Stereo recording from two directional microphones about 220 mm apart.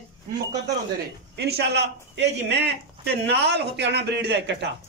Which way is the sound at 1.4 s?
50° right (ahead or behind).